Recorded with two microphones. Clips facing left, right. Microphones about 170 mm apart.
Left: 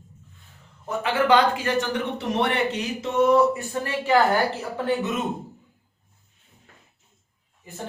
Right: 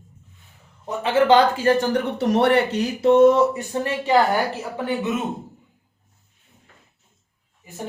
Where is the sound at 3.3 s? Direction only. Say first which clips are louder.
Even; 20° right (ahead or behind).